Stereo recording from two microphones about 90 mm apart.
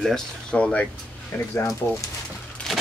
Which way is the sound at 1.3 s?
25° left (ahead or behind).